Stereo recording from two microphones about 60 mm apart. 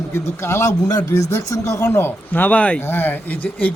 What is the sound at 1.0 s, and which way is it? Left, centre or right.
Speech, left.